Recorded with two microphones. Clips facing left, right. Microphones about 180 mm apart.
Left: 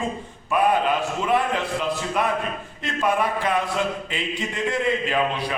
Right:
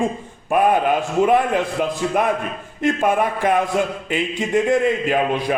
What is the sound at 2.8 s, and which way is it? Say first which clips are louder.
A man's voice: right 5 dB; 50° right (ahead or behind).